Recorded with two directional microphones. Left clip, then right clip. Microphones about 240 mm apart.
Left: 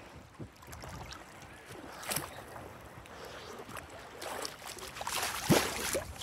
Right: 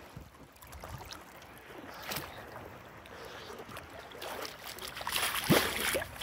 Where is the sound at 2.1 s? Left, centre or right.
Left.